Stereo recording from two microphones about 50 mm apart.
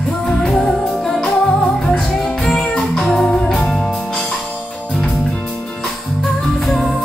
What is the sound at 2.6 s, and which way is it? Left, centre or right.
Music, left.